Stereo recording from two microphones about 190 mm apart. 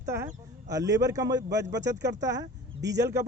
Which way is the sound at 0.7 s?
20° right (ahead or behind).